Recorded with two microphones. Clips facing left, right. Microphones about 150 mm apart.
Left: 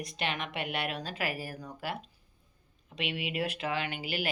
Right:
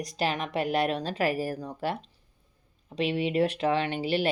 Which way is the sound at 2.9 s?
35° right (ahead or behind).